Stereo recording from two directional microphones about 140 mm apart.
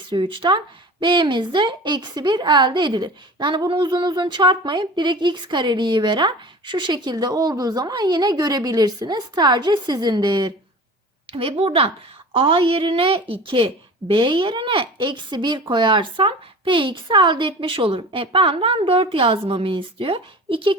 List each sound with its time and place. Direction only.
0.1 s speech: 35° right (ahead or behind)
11.3 s a woman's voice: 40° right (ahead or behind)